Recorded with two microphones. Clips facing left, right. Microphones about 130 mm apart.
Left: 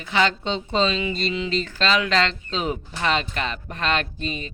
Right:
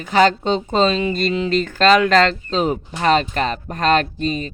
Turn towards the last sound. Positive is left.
turn(degrees=-40)  # may be behind; listen again after turning